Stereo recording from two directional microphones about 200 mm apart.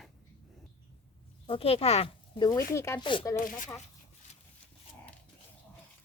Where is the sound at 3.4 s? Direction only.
40° left (ahead or behind).